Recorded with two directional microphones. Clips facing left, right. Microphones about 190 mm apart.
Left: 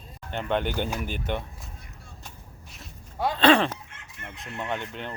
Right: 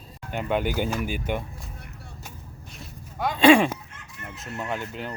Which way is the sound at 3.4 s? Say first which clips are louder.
Right 4 dB; 10° right (ahead or behind).